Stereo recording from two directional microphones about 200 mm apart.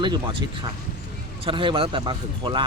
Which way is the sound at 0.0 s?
25° right (ahead or behind).